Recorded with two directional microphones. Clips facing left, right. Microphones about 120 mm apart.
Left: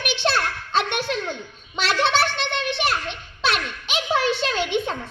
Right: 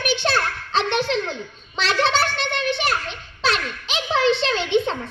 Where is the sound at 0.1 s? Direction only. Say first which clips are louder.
Right 1 dB; 45° right (ahead or behind).